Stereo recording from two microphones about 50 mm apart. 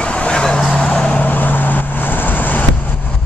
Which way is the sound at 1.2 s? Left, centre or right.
Left.